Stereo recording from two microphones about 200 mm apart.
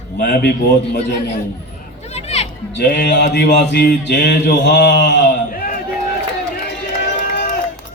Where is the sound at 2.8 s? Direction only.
55° left (ahead or behind).